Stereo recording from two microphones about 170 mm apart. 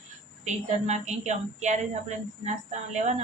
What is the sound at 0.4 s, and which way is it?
A woman's voice, 40° right (ahead or behind).